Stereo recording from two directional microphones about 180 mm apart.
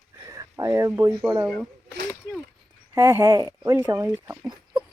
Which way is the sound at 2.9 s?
15° right (ahead or behind).